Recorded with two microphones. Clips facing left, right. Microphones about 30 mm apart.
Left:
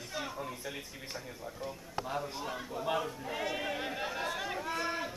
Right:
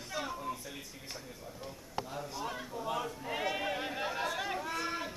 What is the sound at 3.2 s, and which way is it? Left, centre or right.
Speech, centre.